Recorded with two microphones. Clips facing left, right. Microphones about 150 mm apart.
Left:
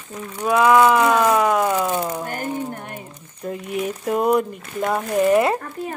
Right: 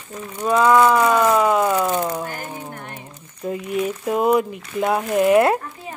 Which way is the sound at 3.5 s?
Centre (ahead or behind).